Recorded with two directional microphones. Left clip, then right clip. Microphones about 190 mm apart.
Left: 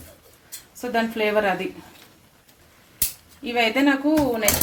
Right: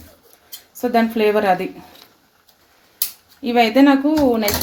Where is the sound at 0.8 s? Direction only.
50° right (ahead or behind).